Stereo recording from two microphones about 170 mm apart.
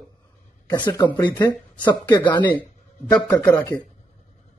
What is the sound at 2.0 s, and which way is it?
Speech, 25° left (ahead or behind).